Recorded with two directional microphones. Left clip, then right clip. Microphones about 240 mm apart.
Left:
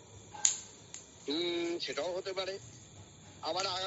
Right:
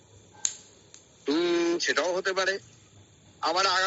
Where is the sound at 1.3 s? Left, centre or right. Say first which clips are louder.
Right 9 dB; right.